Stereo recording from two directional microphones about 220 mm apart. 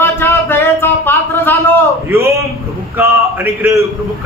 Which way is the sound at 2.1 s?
10° right (ahead or behind).